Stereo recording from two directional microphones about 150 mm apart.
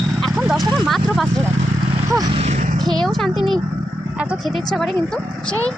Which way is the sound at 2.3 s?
50° right (ahead or behind).